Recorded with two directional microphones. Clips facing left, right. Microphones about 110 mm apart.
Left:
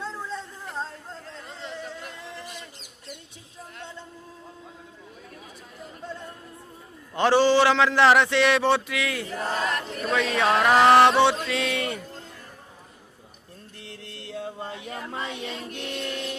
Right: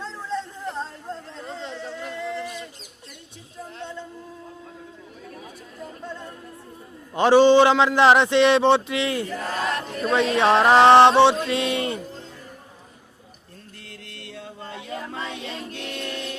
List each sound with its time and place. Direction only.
0.0 s music: 5° left (ahead or behind)
7.1 s a man's voice: 15° right (ahead or behind)
9.6 s a sound: 35° right (ahead or behind)
15.7 s music: 20° left (ahead or behind)